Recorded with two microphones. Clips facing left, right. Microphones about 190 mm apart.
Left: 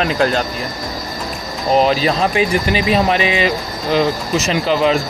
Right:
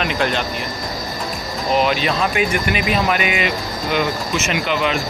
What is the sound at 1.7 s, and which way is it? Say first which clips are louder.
Speech: left 4 dB; 35° left (ahead or behind).